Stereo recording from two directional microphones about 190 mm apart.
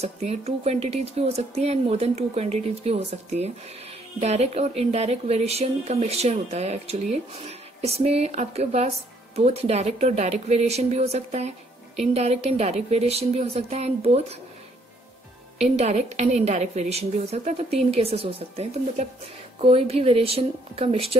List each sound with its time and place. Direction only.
0.0 s speech: 35° right (ahead or behind)
15.6 s speech: 35° right (ahead or behind)